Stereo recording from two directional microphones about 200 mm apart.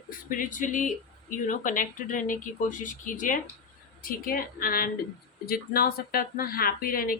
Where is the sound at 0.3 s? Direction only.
40° left (ahead or behind).